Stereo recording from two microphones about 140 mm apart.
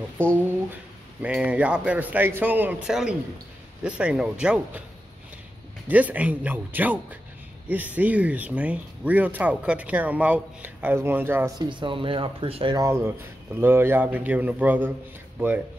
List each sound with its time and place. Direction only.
1.2 s speech: 10° right (ahead or behind)
5.9 s speech: 10° right (ahead or behind)
11.5 s speech: 35° right (ahead or behind)
12.7 s speech: 20° right (ahead or behind)